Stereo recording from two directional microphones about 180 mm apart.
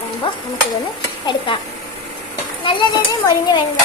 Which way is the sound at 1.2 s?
25° left (ahead or behind).